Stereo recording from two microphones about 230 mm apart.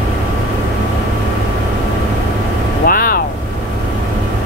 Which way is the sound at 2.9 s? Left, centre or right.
Left.